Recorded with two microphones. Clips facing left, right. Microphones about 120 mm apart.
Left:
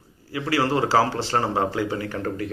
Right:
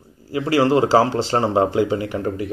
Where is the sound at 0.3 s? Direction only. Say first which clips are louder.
Right 6 dB; 25° right (ahead or behind).